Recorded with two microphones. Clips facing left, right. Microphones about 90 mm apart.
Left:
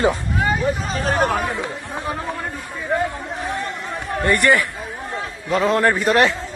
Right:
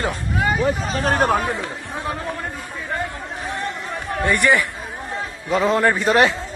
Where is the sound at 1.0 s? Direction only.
40° right (ahead or behind).